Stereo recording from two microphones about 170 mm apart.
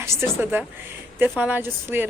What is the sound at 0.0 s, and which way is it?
A woman's voice, 15° right (ahead or behind).